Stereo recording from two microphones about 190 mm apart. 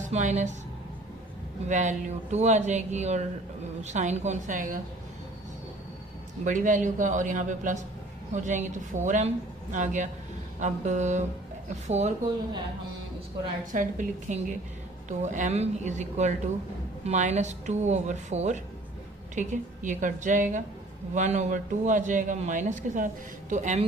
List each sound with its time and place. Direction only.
0.0 s speech: 40° right (ahead or behind)
1.6 s a man's voice: 40° right (ahead or behind)
6.4 s a man's voice: 40° right (ahead or behind)
13.7 s a man's voice: 40° right (ahead or behind)